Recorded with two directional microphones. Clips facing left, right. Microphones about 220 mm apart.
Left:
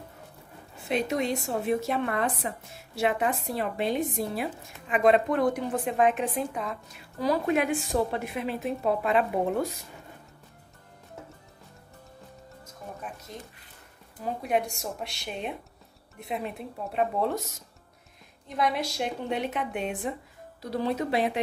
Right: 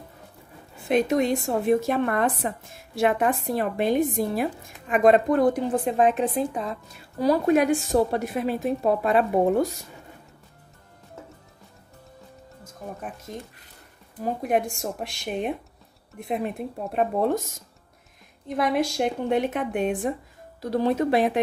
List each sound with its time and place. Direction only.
0.8 s speech: 50° right (ahead or behind)
13.3 s speech: 55° right (ahead or behind)
14.5 s speech: 50° right (ahead or behind)
18.6 s speech: 50° right (ahead or behind)